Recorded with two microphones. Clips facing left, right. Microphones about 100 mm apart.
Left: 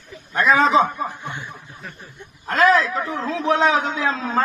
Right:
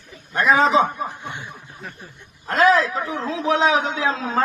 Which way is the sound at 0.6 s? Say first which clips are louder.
Left 1 dB; 25° right (ahead or behind).